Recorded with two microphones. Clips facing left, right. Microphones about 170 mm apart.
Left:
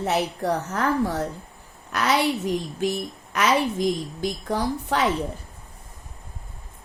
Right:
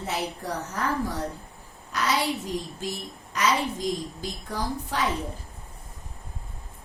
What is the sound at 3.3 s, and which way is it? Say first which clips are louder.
A woman's voice: left 4 dB; 70° left (ahead or behind).